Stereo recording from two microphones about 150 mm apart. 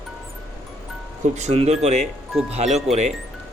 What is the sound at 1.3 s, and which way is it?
Speech, 50° right (ahead or behind).